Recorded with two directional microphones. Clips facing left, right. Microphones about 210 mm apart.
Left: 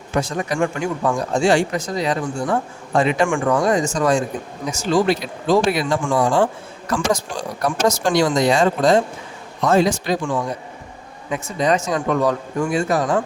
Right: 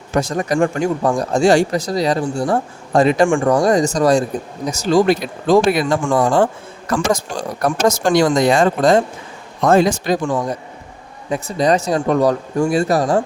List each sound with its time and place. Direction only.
0.1 s a man's voice: 40° right (ahead or behind)
7.6 s a man's voice: 50° right (ahead or behind)